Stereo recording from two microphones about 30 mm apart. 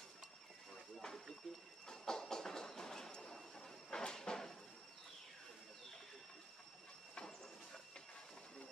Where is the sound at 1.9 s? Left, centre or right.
Centre.